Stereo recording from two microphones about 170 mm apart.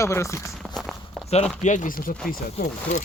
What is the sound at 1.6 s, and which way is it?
Speech, 45° left (ahead or behind).